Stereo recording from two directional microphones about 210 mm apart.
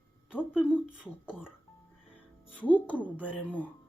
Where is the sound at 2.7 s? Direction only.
5° left (ahead or behind).